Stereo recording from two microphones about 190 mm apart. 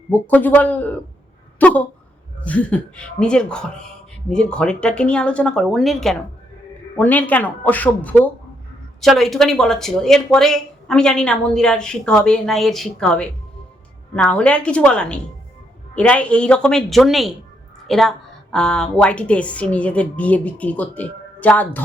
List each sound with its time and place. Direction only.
0.1 s a woman's voice: 10° left (ahead or behind)
1.5 s a sound: 10° left (ahead or behind)
2.4 s a woman's voice: 5° left (ahead or behind)